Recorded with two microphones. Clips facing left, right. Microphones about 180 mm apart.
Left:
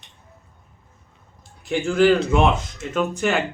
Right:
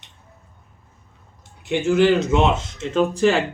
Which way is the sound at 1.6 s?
20° right (ahead or behind).